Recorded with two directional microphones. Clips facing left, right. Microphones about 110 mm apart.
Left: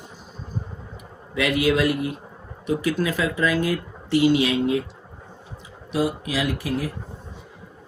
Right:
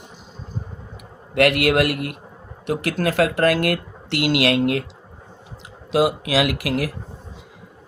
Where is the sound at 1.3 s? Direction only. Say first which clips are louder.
Right 4 dB; 70° right (ahead or behind).